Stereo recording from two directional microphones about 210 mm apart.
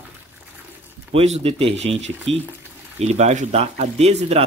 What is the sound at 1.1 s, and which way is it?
Speech, 30° right (ahead or behind).